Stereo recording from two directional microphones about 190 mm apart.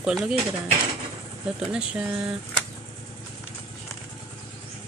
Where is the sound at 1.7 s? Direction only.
5° right (ahead or behind).